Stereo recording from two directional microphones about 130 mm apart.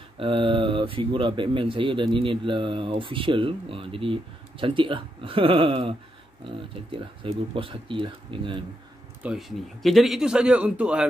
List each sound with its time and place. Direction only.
0.2 s speech: 45° right (ahead or behind)
9.2 s speech: 5° right (ahead or behind)